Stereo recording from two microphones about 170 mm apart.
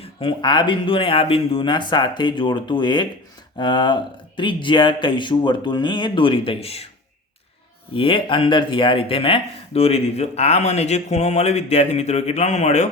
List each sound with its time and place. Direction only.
0.0 s speech: 30° left (ahead or behind)
7.9 s speech: 30° left (ahead or behind)